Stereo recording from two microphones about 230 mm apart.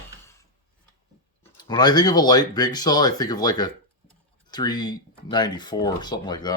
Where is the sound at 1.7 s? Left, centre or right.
Centre.